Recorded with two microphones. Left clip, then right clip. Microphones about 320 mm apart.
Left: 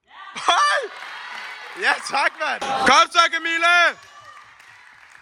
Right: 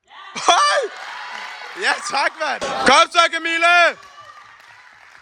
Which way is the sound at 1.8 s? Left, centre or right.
Centre.